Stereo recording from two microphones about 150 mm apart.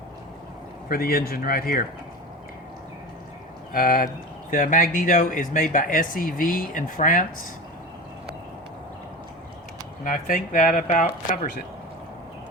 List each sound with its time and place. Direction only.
0.9 s speech: 80° left
3.7 s speech: 75° left (ahead or behind)
4.5 s speech: 60° left (ahead or behind)
10.0 s speech: 65° left (ahead or behind)